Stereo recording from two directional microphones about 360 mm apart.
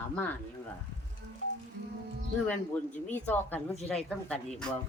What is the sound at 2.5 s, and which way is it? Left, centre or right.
Speech, centre.